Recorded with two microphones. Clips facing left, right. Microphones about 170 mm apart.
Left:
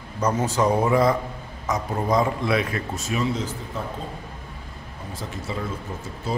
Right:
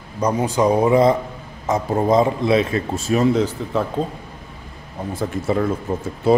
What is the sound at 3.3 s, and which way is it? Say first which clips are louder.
Speech: right 10 dB; 65° right (ahead or behind).